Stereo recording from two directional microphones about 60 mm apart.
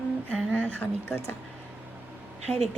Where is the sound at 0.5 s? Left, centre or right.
Left.